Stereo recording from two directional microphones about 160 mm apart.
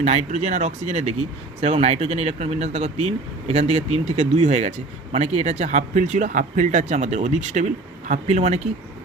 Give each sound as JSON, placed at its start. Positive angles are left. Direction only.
{"t": 0.0, "sound": "speech", "side_deg": -45}